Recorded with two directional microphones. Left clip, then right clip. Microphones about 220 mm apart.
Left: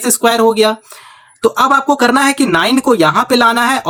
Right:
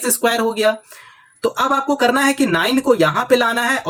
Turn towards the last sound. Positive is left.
turn(degrees=35)  # may be behind; listen again after turning